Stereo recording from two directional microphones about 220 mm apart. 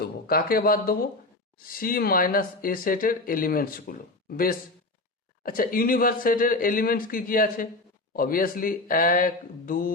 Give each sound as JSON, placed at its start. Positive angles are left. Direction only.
{"t": 0.0, "sound": "speech", "side_deg": 40}